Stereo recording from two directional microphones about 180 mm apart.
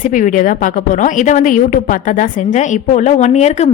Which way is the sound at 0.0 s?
45° left (ahead or behind).